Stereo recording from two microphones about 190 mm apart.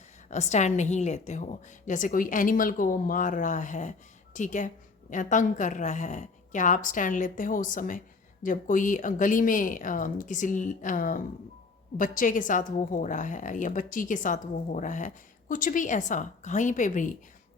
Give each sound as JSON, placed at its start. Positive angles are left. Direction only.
{"t": 0.3, "sound": "a woman's voice", "side_deg": 35}